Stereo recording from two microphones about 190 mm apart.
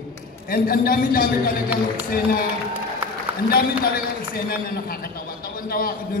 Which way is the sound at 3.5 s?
50° left (ahead or behind).